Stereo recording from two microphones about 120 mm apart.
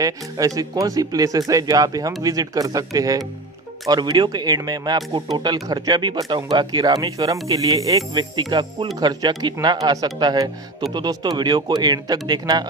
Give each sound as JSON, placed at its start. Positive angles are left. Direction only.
{"t": 0.6, "sound": "speech", "side_deg": -30}